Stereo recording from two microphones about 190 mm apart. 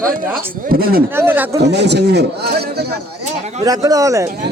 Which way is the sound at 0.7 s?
50° right (ahead or behind).